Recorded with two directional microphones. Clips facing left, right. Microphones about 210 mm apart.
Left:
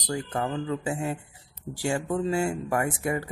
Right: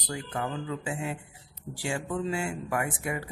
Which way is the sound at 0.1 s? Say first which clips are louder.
Left 4 dB; 40° left (ahead or behind).